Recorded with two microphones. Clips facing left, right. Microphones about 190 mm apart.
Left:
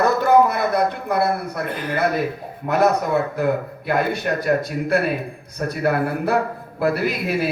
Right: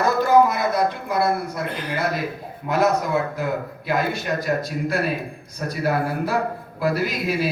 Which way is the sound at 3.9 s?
60° left (ahead or behind).